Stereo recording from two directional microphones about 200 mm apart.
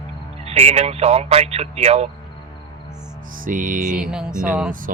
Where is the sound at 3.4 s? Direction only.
40° right (ahead or behind).